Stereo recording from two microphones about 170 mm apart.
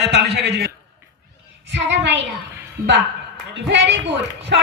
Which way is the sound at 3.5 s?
90° right.